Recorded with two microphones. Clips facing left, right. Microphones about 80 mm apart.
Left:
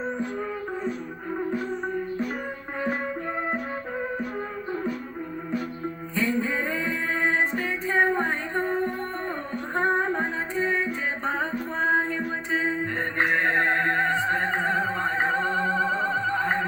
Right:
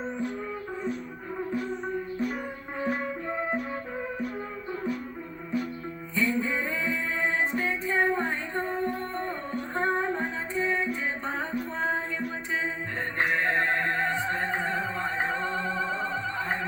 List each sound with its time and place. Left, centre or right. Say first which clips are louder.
2.7 s music: left 2 dB; left
6.1 s music: left 1 dB; left
9.7 s female singing: left 4 dB; left
11.2 s music: left 4 dB; left